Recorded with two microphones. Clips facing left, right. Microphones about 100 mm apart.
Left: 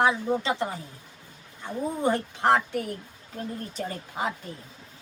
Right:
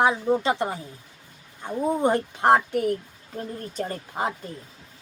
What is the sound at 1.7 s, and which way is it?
Speech, 15° right (ahead or behind).